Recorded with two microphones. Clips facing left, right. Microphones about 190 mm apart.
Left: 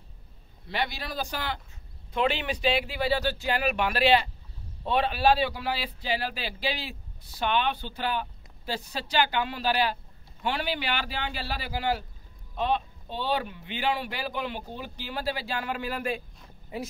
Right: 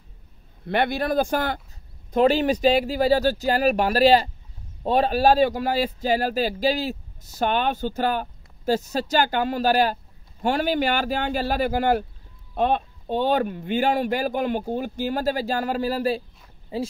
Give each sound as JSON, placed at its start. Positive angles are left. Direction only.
{"t": 0.7, "sound": "a man's voice", "side_deg": -55}